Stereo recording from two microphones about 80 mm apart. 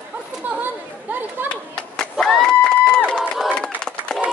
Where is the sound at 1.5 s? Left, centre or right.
Centre.